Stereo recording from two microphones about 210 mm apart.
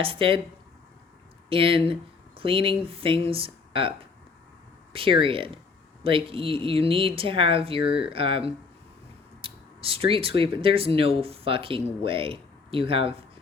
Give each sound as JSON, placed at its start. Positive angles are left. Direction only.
{"t": 0.0, "sound": "speech", "side_deg": -25}
{"t": 1.5, "sound": "speech", "side_deg": -25}
{"t": 4.9, "sound": "speech", "side_deg": -25}